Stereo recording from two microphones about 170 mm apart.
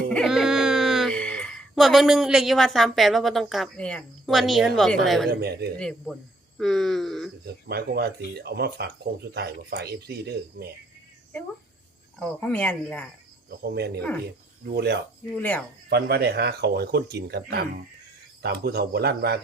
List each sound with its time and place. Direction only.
0.1 s speech: centre (ahead or behind)
5.3 s speech: 70° right (ahead or behind)
6.6 s speech: centre (ahead or behind)
7.4 s speech: 70° right (ahead or behind)
12.2 s speech: 5° left (ahead or behind)
13.5 s speech: 65° right (ahead or behind)
15.4 s speech: 10° left (ahead or behind)
15.9 s speech: 70° right (ahead or behind)